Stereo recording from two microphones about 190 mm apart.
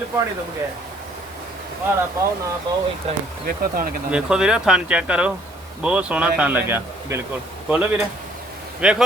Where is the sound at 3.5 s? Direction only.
50° right (ahead or behind).